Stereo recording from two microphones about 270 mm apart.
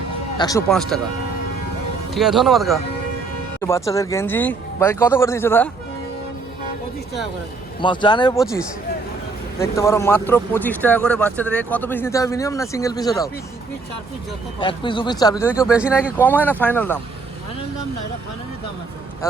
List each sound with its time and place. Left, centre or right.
0.3 s speech: centre
0.7 s speech: centre
2.1 s speech: centre
3.6 s speech: centre
7.8 s speech: centre
9.6 s speech: centre
14.6 s speech: centre
15.7 s speech: centre
16.1 s speech: centre